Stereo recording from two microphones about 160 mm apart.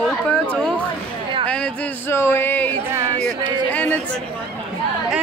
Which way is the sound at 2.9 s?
20° right (ahead or behind).